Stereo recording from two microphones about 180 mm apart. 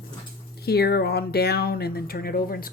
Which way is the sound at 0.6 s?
60° left (ahead or behind).